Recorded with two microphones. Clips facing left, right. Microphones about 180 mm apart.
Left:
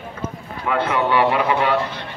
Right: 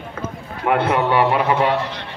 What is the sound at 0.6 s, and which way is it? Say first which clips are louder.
Speech: right 3 dB; 55° right (ahead or behind).